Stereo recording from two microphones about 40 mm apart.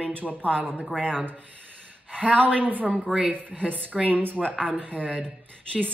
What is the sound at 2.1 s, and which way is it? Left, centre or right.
Mantra, right.